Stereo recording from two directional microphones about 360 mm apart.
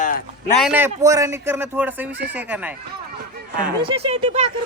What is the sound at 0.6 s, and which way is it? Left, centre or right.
Speech, centre.